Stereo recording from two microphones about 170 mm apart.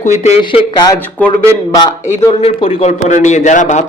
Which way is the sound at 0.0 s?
45° left (ahead or behind).